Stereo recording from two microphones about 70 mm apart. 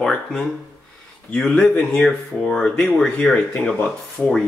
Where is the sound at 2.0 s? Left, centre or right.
Centre.